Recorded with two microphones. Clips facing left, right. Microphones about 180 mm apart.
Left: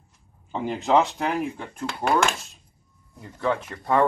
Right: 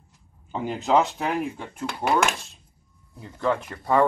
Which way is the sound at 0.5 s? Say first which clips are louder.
Left 1 dB; 5° right (ahead or behind).